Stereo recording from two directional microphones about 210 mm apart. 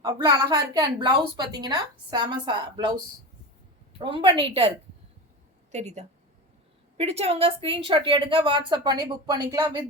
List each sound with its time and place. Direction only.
0.0 s speech: 20° right (ahead or behind)
4.0 s speech: 25° right (ahead or behind)
5.7 s speech: 30° right (ahead or behind); by 9.8 s 15° right (ahead or behind)